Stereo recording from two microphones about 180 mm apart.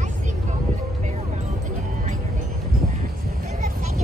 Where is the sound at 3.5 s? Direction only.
40° right (ahead or behind).